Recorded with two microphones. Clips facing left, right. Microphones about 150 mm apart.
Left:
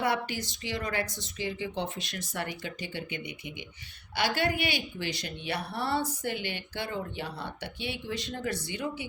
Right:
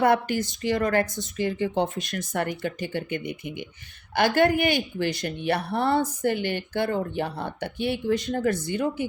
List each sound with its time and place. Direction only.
0.0 s a woman's voice: 50° right (ahead or behind)